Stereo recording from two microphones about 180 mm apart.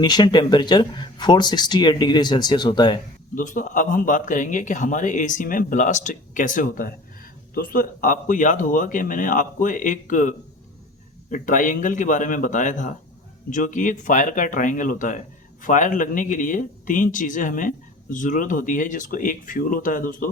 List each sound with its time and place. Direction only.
0.0 s speech: 25° left (ahead or behind)
3.3 s speech: 45° left (ahead or behind)